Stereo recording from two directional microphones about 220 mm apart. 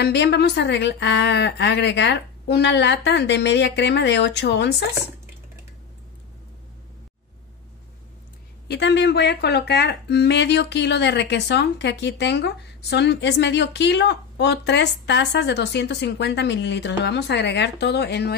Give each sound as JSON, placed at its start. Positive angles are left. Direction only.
{"t": 0.0, "sound": "speech", "side_deg": 50}
{"t": 8.6, "sound": "speech", "side_deg": 50}